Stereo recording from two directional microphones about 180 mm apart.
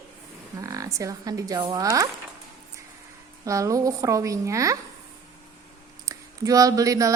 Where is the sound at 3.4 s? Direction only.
15° right (ahead or behind).